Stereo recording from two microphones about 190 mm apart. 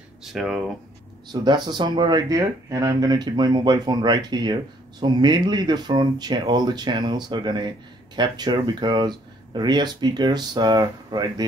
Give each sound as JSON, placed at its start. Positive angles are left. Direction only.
{"t": 0.2, "sound": "speech", "side_deg": 0}
{"t": 1.3, "sound": "speech", "side_deg": -25}